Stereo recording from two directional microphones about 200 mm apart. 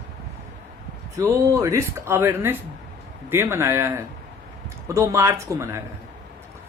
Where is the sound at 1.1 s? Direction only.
15° right (ahead or behind).